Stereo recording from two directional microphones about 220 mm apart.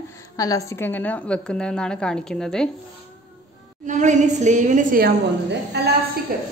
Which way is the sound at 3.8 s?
35° right (ahead or behind).